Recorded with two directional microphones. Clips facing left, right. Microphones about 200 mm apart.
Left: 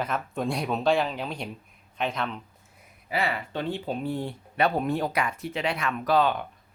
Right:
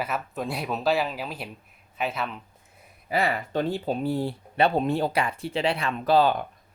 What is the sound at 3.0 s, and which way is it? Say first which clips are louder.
Speech: right 3 dB; 40° right (ahead or behind).